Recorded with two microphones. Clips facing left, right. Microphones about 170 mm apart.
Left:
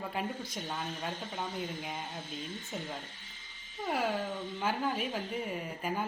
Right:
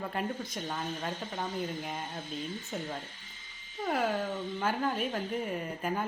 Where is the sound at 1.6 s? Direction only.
Centre (ahead or behind).